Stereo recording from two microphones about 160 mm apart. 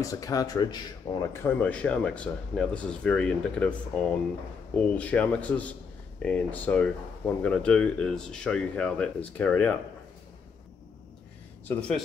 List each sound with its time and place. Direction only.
0.0 s speech: 20° left (ahead or behind)